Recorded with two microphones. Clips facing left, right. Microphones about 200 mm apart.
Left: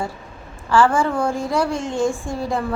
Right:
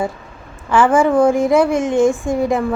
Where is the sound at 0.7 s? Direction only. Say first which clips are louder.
Right 4 dB; 20° right (ahead or behind).